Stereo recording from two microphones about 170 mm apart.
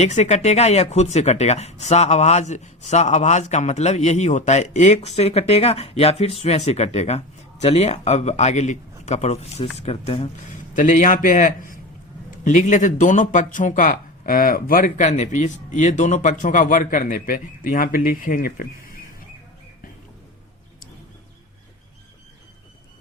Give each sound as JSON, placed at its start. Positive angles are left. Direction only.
{"t": 0.0, "sound": "speech", "side_deg": 40}
{"t": 10.8, "sound": "speech", "side_deg": 50}